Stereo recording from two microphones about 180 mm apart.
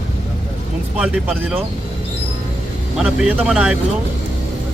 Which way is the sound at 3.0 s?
5° right (ahead or behind).